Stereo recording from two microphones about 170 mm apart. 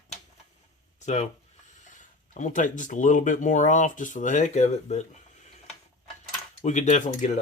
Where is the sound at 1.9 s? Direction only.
50° left (ahead or behind).